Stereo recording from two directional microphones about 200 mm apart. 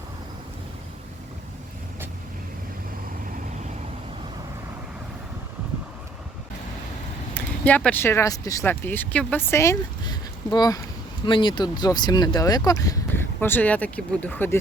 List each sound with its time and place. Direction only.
7.3 s speech: 5° left (ahead or behind)